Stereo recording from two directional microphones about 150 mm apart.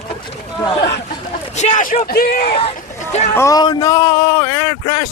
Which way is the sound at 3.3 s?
20° left (ahead or behind).